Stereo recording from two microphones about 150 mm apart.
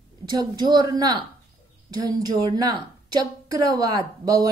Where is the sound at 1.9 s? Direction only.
25° right (ahead or behind).